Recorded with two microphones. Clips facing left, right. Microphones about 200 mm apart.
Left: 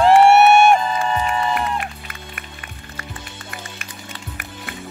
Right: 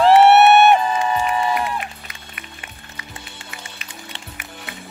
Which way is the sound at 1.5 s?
50° left (ahead or behind).